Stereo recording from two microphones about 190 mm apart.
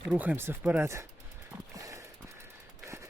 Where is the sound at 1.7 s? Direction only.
20° right (ahead or behind).